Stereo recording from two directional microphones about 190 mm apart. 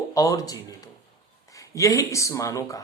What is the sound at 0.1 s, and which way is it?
A man's voice, 20° left (ahead or behind).